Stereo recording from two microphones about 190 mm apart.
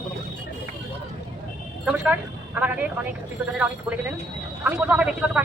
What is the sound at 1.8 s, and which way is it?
Speech, 10° right (ahead or behind).